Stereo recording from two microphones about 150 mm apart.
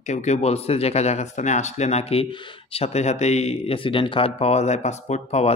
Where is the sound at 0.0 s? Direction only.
50° left (ahead or behind).